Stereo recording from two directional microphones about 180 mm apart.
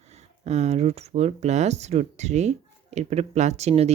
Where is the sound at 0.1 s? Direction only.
40° right (ahead or behind).